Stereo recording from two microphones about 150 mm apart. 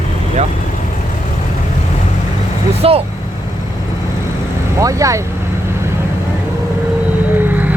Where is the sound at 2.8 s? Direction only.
40° right (ahead or behind).